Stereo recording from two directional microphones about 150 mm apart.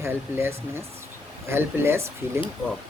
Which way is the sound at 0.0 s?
15° right (ahead or behind).